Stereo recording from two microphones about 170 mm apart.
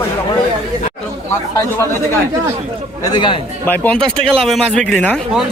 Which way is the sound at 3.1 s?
30° left (ahead or behind).